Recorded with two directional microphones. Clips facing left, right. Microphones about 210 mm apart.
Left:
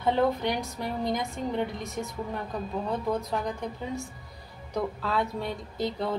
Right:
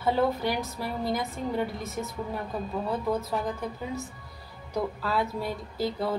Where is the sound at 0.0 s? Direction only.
5° right (ahead or behind).